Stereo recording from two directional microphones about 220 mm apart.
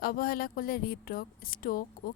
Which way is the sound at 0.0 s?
40° left (ahead or behind).